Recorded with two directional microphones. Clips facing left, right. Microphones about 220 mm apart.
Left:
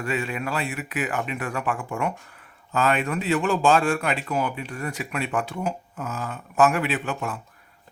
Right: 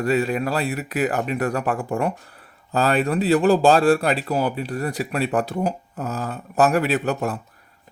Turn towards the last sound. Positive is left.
turn(degrees=-40)  # may be behind; listen again after turning